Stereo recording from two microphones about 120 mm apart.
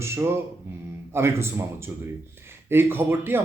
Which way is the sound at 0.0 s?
20° right (ahead or behind).